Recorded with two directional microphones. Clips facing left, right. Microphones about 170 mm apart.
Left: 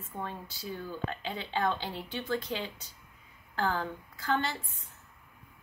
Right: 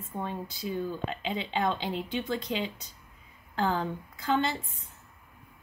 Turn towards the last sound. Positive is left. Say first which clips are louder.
# right 3 dB
turn(degrees=-20)  # may be behind; listen again after turning